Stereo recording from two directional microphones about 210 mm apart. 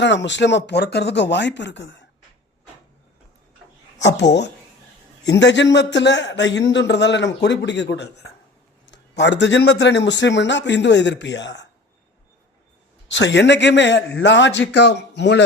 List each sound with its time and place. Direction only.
0.0 s speech: 60° left (ahead or behind)
5.2 s speech: 55° left (ahead or behind)
13.1 s speech: 60° left (ahead or behind)